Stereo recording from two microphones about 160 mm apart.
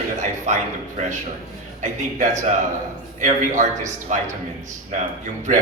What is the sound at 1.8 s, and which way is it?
A man's voice, 50° right (ahead or behind).